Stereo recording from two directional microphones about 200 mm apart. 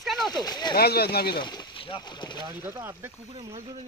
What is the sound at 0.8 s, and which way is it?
Speech, 50° left (ahead or behind).